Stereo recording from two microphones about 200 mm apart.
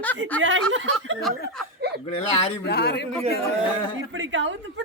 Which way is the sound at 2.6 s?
55° left (ahead or behind).